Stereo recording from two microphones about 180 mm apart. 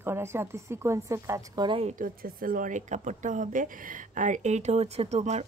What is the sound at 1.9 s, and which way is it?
Speech, 50° right (ahead or behind).